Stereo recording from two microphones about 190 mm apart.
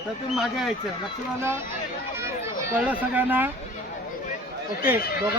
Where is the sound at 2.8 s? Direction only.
10° right (ahead or behind).